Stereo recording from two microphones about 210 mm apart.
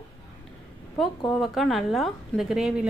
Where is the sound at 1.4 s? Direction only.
Centre (ahead or behind).